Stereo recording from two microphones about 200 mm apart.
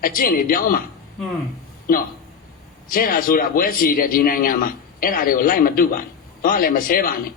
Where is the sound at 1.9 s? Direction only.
45° left (ahead or behind).